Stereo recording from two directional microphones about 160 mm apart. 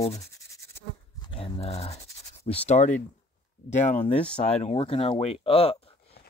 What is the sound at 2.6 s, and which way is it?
Speech, 50° left (ahead or behind).